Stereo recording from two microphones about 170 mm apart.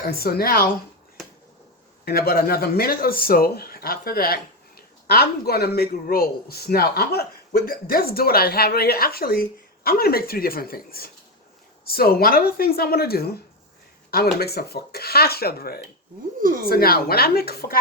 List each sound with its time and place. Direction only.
0.2 s speech: 65° left (ahead or behind)
2.0 s speech: 65° left (ahead or behind)
14.3 s speech: 70° left (ahead or behind)